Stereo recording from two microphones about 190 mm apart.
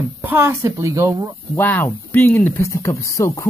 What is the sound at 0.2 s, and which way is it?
Speech, 10° right (ahead or behind).